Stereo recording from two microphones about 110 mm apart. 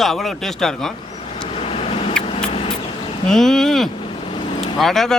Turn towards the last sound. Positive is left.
turn(degrees=5)  # may be behind; listen again after turning